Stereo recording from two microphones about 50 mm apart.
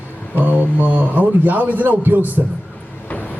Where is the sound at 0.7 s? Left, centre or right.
Right.